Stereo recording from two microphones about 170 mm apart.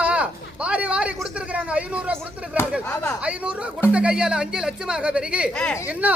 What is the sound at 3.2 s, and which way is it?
Speech, 5° right (ahead or behind).